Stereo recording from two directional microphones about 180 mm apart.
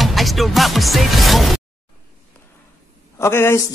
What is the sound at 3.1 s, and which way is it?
Speech, 15° left (ahead or behind).